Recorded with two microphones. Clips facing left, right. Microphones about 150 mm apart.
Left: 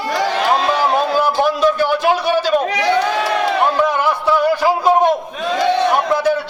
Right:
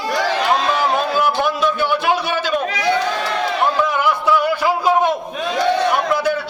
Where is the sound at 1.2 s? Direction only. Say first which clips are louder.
Left 3 dB; 35° left (ahead or behind).